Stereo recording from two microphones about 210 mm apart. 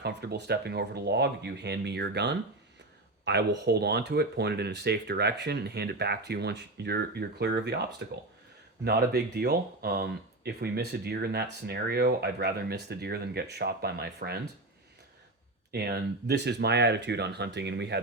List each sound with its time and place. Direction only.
0.0 s speech: 50° right (ahead or behind)
15.7 s speech: 50° right (ahead or behind)